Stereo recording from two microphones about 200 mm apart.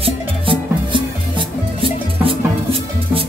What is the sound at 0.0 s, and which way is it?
Music, 25° right (ahead or behind).